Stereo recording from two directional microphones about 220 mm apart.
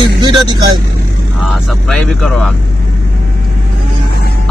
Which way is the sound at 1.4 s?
Centre (ahead or behind).